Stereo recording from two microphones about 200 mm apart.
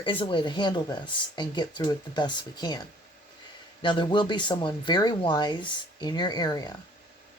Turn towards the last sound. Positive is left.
turn(degrees=20)  # may be behind; listen again after turning